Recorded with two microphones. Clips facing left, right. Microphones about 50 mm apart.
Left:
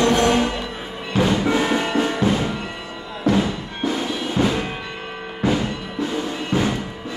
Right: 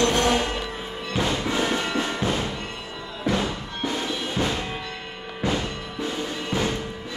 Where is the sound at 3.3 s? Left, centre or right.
Centre.